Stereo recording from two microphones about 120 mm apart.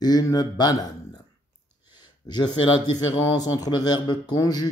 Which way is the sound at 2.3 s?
35° left (ahead or behind).